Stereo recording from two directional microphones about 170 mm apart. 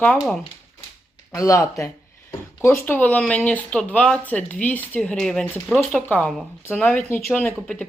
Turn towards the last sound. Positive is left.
turn(degrees=5)  # may be behind; listen again after turning